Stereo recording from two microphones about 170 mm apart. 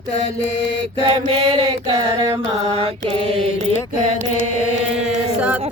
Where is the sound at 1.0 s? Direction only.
30° right (ahead or behind).